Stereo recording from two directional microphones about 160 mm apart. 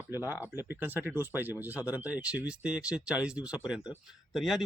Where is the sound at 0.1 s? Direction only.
15° right (ahead or behind).